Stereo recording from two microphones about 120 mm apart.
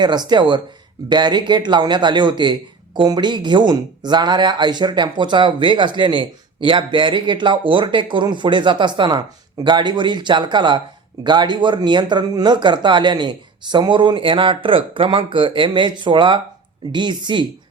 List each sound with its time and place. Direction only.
0.0 s speech: 35° right (ahead or behind)